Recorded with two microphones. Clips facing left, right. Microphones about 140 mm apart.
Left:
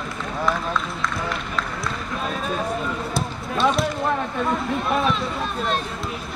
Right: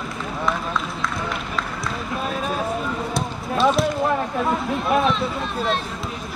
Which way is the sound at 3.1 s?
Centre (ahead or behind).